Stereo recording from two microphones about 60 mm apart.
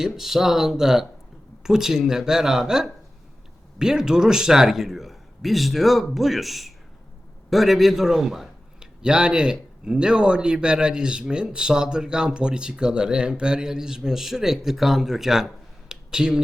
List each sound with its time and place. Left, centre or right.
0.0 s a man's voice: centre